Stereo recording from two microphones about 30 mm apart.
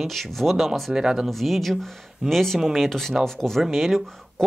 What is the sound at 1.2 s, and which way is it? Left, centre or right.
Speech, centre.